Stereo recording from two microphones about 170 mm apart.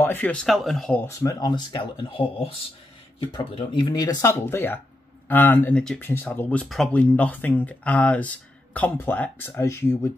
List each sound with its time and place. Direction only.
0.0 s speech: 10° left (ahead or behind)
1.2 s speech: 25° left (ahead or behind)